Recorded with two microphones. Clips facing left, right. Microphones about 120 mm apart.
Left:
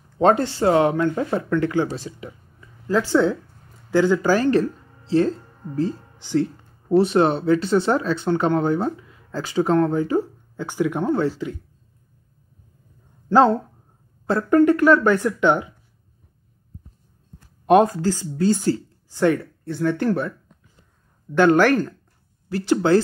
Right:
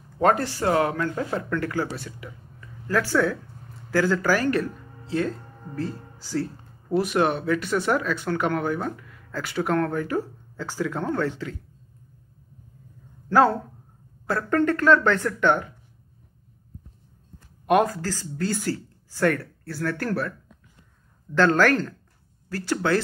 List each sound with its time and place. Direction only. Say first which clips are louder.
0.2 s speech: left 4 dB; 25° left (ahead or behind)
6.1 s speech: left 7 dB; 20° left (ahead or behind)
9.6 s speech: left 6 dB; 15° left (ahead or behind)
13.3 s speech: left 3 dB; 20° left (ahead or behind)
14.5 s speech: left 5 dB; 10° left (ahead or behind)
17.6 s speech: left 5 dB; 25° left (ahead or behind)
21.4 s speech: left 4 dB; 15° left (ahead or behind)